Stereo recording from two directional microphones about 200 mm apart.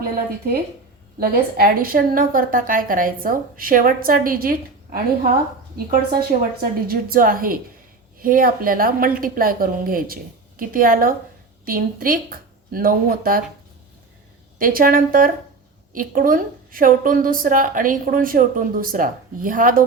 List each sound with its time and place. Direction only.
1.2 s a woman's voice: 50° right (ahead or behind)
14.6 s a woman's voice: 45° right (ahead or behind)